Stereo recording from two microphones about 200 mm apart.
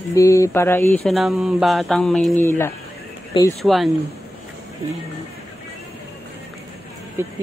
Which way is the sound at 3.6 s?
Centre (ahead or behind).